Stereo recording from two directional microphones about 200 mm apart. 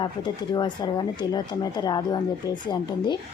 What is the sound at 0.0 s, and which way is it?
A woman's voice, 20° left (ahead or behind).